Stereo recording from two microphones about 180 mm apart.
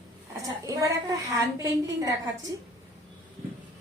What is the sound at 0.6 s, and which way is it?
A woman's voice, 20° right (ahead or behind).